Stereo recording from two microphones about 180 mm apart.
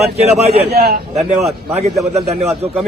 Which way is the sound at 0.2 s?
35° right (ahead or behind).